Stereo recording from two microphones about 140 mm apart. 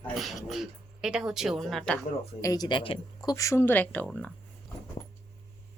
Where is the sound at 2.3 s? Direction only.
25° left (ahead or behind).